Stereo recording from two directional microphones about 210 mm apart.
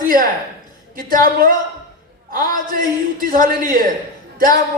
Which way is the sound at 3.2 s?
40° right (ahead or behind).